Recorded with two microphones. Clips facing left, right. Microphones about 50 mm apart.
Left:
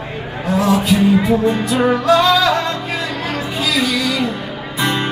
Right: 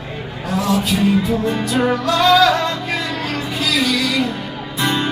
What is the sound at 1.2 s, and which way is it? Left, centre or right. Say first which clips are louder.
Music: left 4 dB; left.